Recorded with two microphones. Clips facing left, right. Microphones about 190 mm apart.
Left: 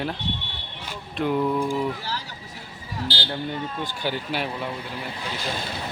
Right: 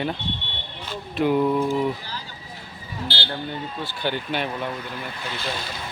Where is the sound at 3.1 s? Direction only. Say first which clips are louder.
Even; 35° left (ahead or behind).